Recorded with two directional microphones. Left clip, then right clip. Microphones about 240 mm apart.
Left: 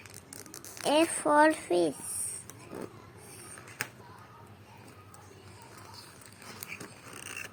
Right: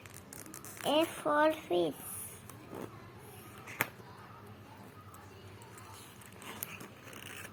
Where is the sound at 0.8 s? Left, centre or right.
Left.